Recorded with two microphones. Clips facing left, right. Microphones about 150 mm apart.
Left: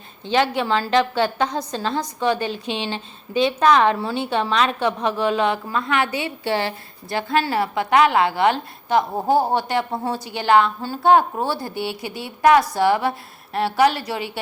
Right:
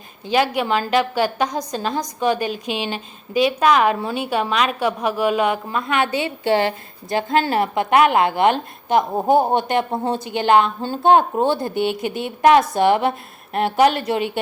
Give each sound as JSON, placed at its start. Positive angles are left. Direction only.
{"t": 0.3, "sound": "a woman's voice", "side_deg": -15}